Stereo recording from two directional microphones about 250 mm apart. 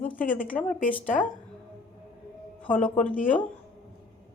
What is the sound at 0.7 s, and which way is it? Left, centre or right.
Speech, left.